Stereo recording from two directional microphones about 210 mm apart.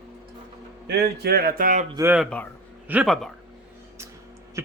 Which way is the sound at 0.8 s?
50° right (ahead or behind).